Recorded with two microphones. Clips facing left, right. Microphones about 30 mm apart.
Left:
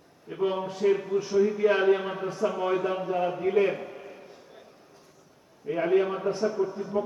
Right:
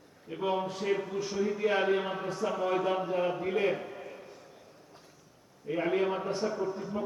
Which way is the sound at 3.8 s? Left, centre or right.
Centre.